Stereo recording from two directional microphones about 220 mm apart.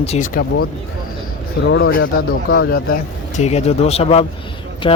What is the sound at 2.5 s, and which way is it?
Speech, 45° left (ahead or behind).